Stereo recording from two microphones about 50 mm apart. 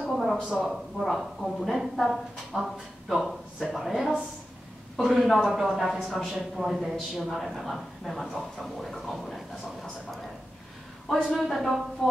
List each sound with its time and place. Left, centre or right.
0.0 s a sound: centre
0.4 s speech: centre
0.7 s speech: centre
11.2 s speech: centre